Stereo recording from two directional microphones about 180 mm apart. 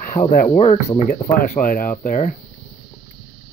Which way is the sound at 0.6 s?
40° left (ahead or behind).